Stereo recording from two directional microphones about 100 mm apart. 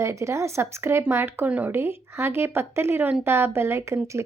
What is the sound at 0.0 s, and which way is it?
A woman's voice, 30° right (ahead or behind).